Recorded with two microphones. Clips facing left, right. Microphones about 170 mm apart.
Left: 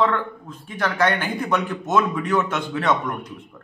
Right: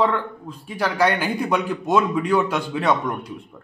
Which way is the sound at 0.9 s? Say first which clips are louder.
Right 2 dB; 10° right (ahead or behind).